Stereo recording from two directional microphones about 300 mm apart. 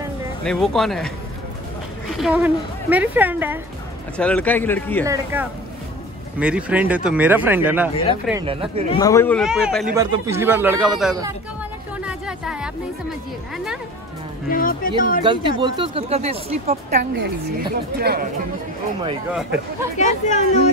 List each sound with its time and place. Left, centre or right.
0.4 s speech: centre
2.1 s speech: centre
4.2 s speech: centre
5.0 s a man's voice: centre
7.9 s speech: centre
8.3 s a man's voice: centre
8.9 s a man's voice: centre
12.0 s a sound: centre
14.5 s speech: left
15.2 s speech: centre
17.0 s a woman's voice: right
20.0 s speech: left